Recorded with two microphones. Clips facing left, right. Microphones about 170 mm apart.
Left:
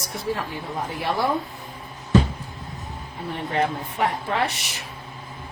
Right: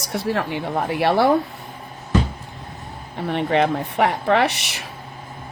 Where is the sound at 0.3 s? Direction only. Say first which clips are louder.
Right 4 dB; 75° right (ahead or behind).